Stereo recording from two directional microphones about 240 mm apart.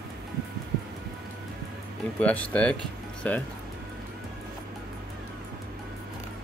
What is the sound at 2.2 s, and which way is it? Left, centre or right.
Speech, centre.